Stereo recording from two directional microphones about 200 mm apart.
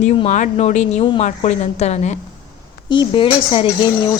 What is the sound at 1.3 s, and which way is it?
Speech, 35° left (ahead or behind).